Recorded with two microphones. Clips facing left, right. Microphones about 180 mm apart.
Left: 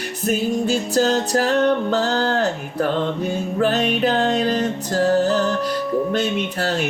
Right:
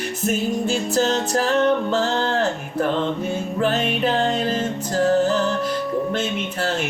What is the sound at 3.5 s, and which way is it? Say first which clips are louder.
Music: left 3 dB; 40° left (ahead or behind).